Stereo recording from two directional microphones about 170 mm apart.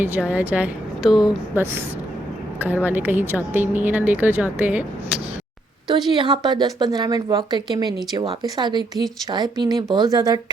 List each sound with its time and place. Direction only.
0.0 s speech: 10° right (ahead or behind)
6.1 s a woman's voice: 30° right (ahead or behind)